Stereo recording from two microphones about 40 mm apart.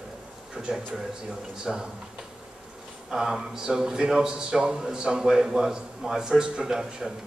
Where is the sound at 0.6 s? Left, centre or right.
Right.